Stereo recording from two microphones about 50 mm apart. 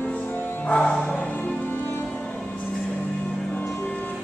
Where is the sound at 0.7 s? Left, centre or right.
Centre.